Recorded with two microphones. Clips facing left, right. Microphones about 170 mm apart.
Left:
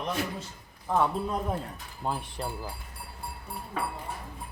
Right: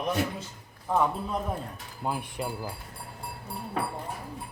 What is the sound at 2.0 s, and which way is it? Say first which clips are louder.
Speech: right 1 dB; 10° right (ahead or behind).